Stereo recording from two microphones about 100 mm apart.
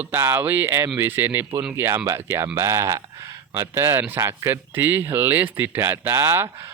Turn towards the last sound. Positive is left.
turn(degrees=-30)  # may be behind; listen again after turning